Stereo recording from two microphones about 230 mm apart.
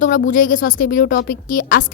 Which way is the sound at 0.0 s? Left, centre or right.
Left.